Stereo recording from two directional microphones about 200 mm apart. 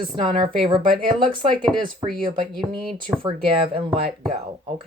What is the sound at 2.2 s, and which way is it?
Speech, 25° right (ahead or behind).